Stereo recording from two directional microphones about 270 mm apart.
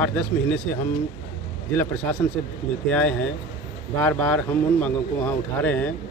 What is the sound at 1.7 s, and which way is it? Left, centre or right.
A man's voice, centre.